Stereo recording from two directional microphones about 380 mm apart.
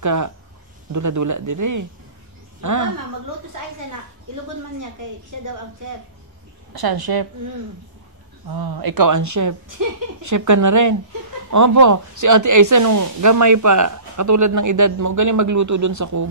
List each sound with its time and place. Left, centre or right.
0.0 s speech: right
5.4 s speech: right
6.7 s a woman's voice: right